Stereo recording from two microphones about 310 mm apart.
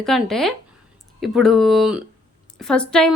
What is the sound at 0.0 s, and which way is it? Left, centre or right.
A woman's voice, centre.